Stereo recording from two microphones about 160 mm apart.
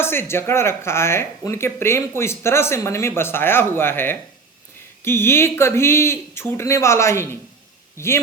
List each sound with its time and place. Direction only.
0.0 s speech: 15° left (ahead or behind)